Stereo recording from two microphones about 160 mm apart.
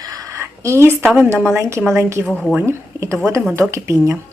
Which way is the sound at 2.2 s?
5° left (ahead or behind).